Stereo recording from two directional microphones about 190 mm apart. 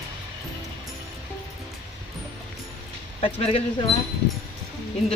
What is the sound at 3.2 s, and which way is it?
Speech, 30° left (ahead or behind).